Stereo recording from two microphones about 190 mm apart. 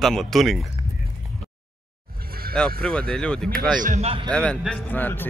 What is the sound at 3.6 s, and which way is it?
Speech, 45° right (ahead or behind).